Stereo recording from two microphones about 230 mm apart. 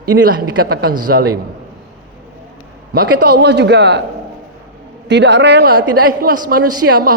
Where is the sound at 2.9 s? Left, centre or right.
Right.